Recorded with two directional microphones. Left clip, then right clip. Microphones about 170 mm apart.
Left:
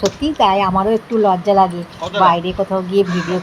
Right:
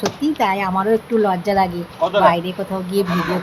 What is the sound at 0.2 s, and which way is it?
Speech, 5° left (ahead or behind).